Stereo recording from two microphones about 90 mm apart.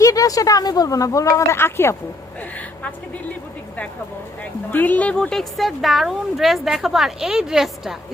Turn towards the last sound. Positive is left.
turn(degrees=-5)  # may be behind; listen again after turning